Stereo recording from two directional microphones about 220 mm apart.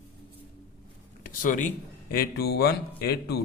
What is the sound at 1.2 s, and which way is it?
Speech, 40° left (ahead or behind).